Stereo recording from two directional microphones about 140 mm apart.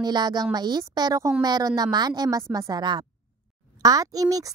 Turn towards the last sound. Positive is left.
turn(degrees=-25)  # may be behind; listen again after turning